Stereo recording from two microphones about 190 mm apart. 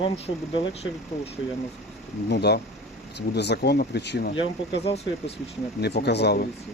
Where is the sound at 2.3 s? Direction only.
60° left (ahead or behind).